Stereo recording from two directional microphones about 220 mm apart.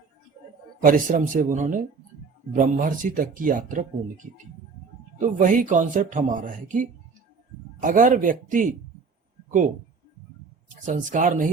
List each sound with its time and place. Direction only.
0.9 s speech: 35° right (ahead or behind)
10.8 s speech: 35° right (ahead or behind)